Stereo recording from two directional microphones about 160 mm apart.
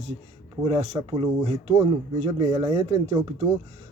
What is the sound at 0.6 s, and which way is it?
Speech, 40° right (ahead or behind).